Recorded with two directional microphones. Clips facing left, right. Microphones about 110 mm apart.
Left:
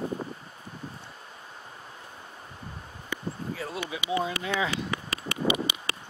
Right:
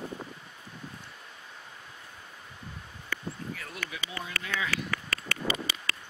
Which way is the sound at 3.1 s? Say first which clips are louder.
Left 3 dB; 25° left (ahead or behind).